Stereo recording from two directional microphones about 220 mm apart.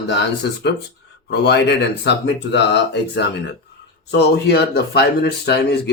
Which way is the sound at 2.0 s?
55° left (ahead or behind).